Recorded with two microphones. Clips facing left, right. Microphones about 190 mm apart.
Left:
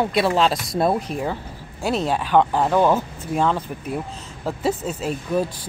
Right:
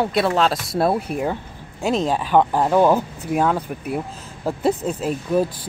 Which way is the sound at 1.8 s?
10° left (ahead or behind).